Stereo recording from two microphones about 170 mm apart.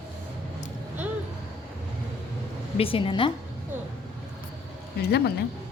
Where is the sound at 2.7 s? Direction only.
35° left (ahead or behind).